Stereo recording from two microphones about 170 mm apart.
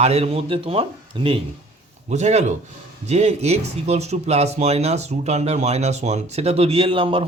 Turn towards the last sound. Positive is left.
turn(degrees=-30)  # may be behind; listen again after turning